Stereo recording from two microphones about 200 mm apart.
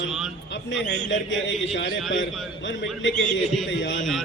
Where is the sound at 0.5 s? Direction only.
65° left (ahead or behind).